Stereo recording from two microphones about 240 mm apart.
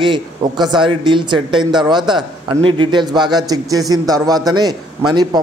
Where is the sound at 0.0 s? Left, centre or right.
Centre.